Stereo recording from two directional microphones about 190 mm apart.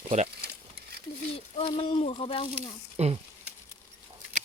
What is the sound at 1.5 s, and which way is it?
Speech, 30° left (ahead or behind).